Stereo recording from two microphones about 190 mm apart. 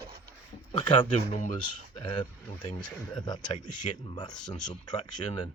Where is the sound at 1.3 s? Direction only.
40° left (ahead or behind).